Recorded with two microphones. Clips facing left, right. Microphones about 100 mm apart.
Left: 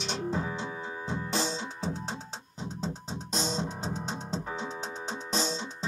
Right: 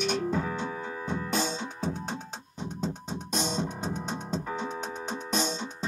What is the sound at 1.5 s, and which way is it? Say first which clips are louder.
Music: right 1 dB; 45° right (ahead or behind).